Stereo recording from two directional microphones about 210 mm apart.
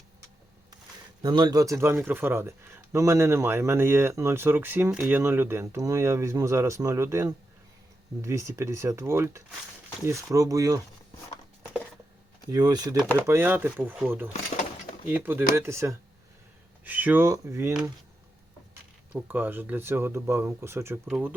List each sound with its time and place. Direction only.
1.2 s speech: 20° right (ahead or behind)
12.5 s speech: 20° right (ahead or behind)